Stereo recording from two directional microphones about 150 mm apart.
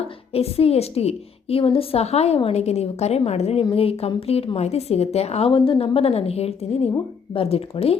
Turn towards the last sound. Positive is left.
turn(degrees=40)  # may be behind; listen again after turning